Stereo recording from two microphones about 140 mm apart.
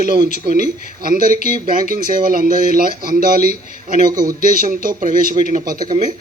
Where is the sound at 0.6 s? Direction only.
90° right.